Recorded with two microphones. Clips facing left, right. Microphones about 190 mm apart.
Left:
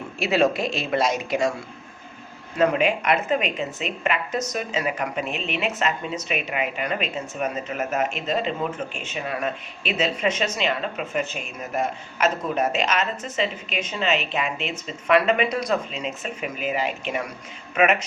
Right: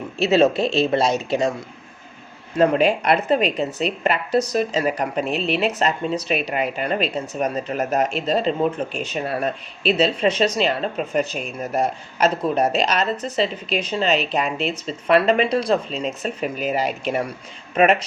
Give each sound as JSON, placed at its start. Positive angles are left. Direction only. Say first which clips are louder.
{"t": 0.2, "sound": "speech", "louder": "right 4 dB", "side_deg": -25}
{"t": 2.6, "sound": "a woman's voice", "louder": "right 4 dB", "side_deg": -35}